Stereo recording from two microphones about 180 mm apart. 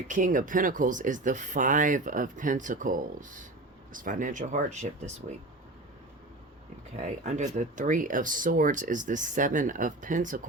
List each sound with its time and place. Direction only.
0.1 s speech: 45° right (ahead or behind)
7.0 s speech: 40° right (ahead or behind)